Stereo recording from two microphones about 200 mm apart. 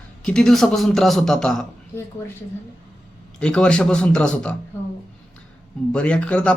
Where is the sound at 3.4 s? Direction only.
5° left (ahead or behind).